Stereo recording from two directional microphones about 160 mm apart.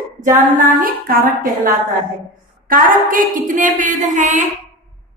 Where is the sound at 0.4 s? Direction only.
60° right (ahead or behind).